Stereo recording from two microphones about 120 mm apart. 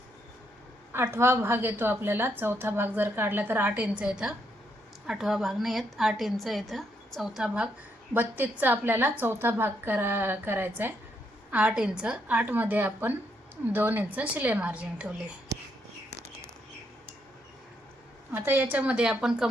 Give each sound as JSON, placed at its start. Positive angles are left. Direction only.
{"t": 0.9, "sound": "a woman's voice", "side_deg": -20}
{"t": 18.3, "sound": "a woman's voice", "side_deg": -20}